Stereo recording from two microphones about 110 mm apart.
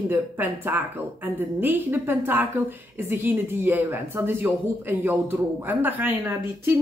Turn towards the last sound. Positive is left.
turn(degrees=-15)  # may be behind; listen again after turning